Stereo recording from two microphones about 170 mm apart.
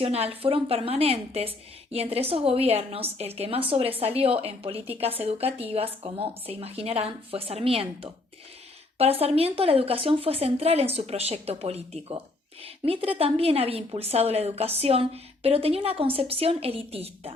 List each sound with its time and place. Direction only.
0.0 s a woman's voice: 35° right (ahead or behind)